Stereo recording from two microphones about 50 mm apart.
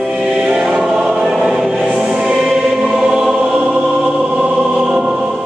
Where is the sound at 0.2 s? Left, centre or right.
Centre.